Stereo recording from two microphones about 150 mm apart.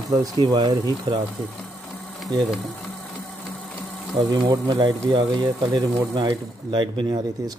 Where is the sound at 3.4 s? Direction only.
10° left (ahead or behind).